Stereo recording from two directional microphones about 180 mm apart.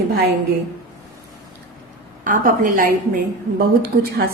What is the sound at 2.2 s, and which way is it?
A woman's voice, 50° right (ahead or behind).